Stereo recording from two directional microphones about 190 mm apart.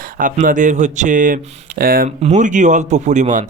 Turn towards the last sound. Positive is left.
turn(degrees=-40)  # may be behind; listen again after turning